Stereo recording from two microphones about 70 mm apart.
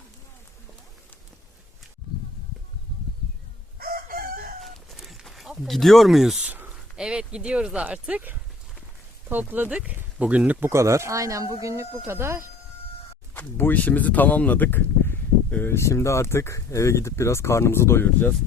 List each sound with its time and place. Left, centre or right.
4.6 s a sound: centre
6.4 s a sound: right
6.7 s speech: centre
10.7 s speech: right
13.3 s speech: left
15.7 s speech: left